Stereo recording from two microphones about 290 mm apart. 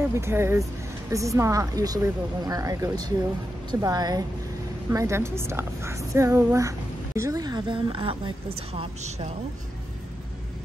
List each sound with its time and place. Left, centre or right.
0.1 s a woman's voice: centre